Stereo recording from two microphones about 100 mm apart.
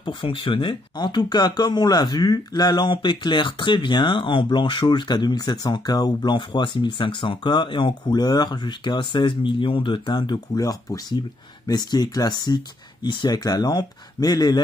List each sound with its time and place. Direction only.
0.0 s speech: 60° left (ahead or behind)